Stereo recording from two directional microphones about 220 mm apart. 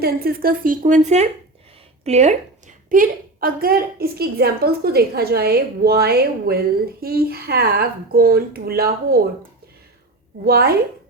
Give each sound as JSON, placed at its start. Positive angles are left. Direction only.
{"t": 0.0, "sound": "a woman's voice", "side_deg": -45}
{"t": 10.4, "sound": "a woman's voice", "side_deg": -45}